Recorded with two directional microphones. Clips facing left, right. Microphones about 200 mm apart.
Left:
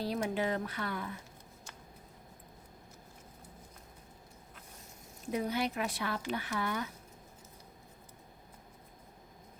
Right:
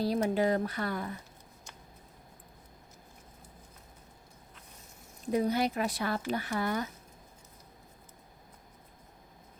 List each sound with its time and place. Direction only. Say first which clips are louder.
0.0 s speech: right 5 dB; 40° right (ahead or behind)
5.3 s speech: right 5 dB; 40° right (ahead or behind)